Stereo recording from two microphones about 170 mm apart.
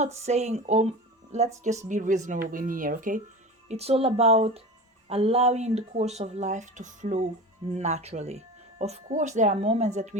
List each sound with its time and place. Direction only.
0.0 s speech: 40° right (ahead or behind)
3.7 s speech: 35° right (ahead or behind)